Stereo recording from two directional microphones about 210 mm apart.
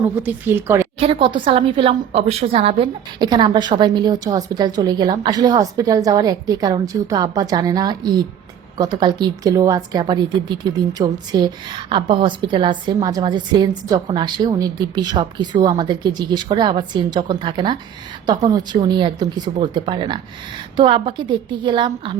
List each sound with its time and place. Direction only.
0.2 s speech: 10° right (ahead or behind)
0.9 s a woman's voice: 25° right (ahead or behind)